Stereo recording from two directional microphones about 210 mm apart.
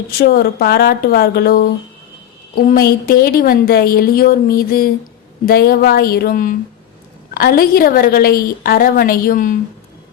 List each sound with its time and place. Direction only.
0.2 s a woman's voice: 50° left (ahead or behind)